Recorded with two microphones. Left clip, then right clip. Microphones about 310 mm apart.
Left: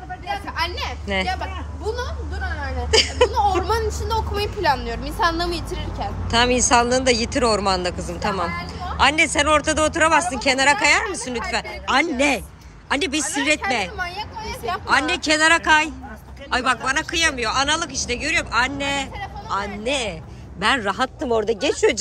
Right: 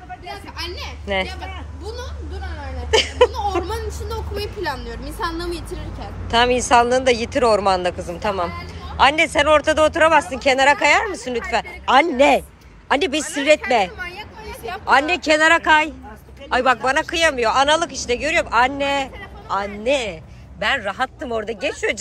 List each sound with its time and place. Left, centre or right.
0.6 s children playing: centre
1.0 s speech: centre
3.3 s speech: centre
6.3 s speech: centre
13.9 s a sound: left
14.9 s speech: centre